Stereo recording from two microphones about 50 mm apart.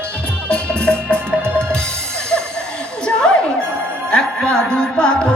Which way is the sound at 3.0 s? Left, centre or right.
Centre.